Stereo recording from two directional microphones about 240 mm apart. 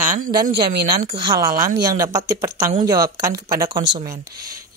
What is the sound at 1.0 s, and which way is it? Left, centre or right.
Speech, centre.